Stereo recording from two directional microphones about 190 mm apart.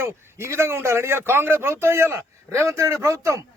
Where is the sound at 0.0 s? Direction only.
15° right (ahead or behind).